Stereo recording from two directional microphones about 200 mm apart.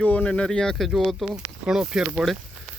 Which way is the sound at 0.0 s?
5° left (ahead or behind).